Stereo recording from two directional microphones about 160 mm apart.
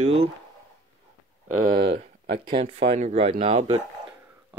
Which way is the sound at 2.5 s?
35° right (ahead or behind).